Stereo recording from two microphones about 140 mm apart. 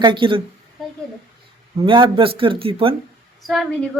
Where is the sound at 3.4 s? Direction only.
Centre (ahead or behind).